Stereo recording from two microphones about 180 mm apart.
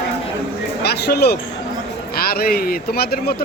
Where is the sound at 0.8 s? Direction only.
65° left (ahead or behind).